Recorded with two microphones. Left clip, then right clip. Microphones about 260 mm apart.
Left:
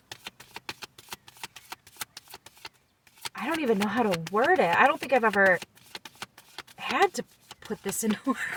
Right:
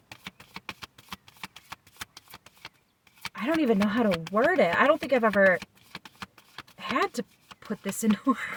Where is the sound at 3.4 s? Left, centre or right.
Right.